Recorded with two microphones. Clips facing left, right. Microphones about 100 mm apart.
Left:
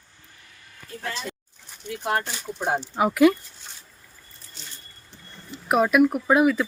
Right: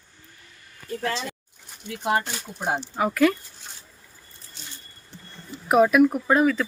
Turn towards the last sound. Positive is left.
turn(degrees=10)  # may be behind; listen again after turning